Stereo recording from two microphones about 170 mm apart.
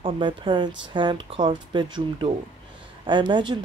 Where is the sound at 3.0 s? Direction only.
25° right (ahead or behind).